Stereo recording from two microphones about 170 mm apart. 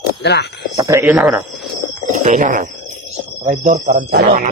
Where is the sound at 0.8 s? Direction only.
15° right (ahead or behind).